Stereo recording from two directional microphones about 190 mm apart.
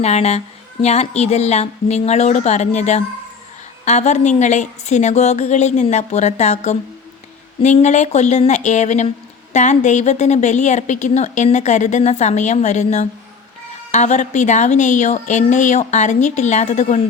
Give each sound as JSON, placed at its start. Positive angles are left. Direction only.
{"t": 0.0, "sound": "a woman's voice", "side_deg": 35}